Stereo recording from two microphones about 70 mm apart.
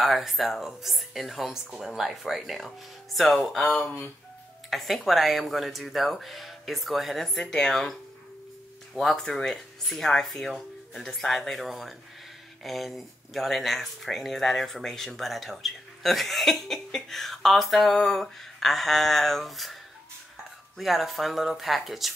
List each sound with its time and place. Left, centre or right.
0.0 s speech: centre
3.8 s speech: left
4.6 s speech: centre